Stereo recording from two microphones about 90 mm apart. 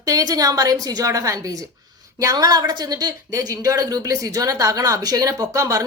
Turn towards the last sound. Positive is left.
turn(degrees=-40)  # may be behind; listen again after turning